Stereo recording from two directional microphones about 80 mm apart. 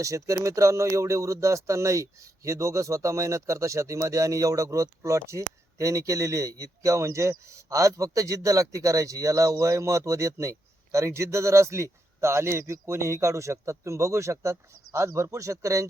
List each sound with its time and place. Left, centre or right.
0.0 s speech: right